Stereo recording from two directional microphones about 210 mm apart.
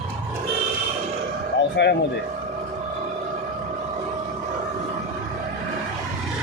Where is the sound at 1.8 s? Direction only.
55° left (ahead or behind).